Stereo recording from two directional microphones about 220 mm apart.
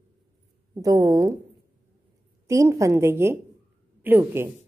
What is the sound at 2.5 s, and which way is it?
A woman's voice, 15° right (ahead or behind).